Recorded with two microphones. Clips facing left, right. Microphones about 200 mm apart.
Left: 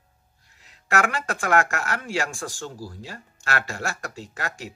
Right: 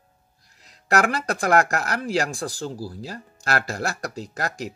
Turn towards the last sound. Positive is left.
turn(degrees=-40)  # may be behind; listen again after turning